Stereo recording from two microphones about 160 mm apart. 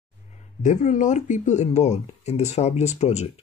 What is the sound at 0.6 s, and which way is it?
Speech, 50° left (ahead or behind).